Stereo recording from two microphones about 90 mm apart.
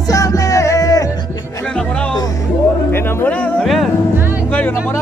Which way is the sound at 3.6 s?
Centre (ahead or behind).